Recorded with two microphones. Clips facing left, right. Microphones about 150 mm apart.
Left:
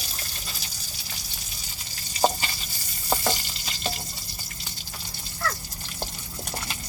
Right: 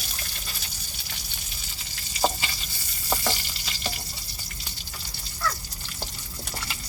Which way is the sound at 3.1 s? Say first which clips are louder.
Left 2 dB; 20° left (ahead or behind).